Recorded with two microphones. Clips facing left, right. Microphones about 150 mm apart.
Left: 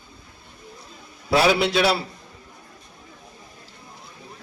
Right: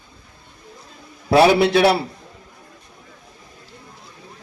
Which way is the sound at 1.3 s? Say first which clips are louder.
Right 5 dB; 55° right (ahead or behind).